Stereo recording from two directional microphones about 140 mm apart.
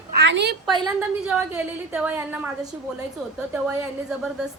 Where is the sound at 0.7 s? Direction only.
35° right (ahead or behind).